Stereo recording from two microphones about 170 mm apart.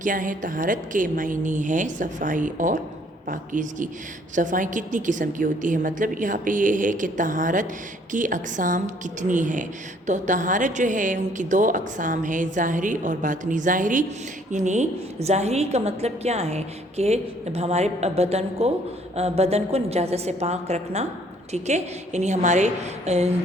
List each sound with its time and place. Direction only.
0.0 s a woman's voice: 50° right (ahead or behind)